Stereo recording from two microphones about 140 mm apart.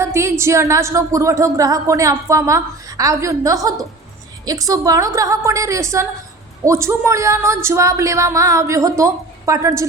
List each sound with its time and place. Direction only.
0.0 s speech: 20° right (ahead or behind)